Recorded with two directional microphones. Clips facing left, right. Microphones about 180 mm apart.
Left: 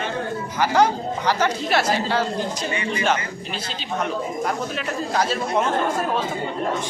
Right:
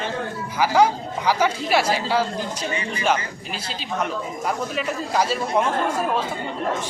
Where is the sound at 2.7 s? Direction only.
30° right (ahead or behind).